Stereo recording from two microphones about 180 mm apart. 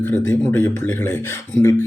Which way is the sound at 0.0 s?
10° left (ahead or behind).